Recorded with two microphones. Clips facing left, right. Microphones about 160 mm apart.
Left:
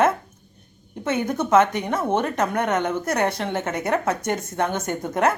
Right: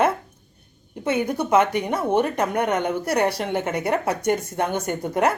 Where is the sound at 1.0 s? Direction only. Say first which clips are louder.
Right 1 dB; 10° right (ahead or behind).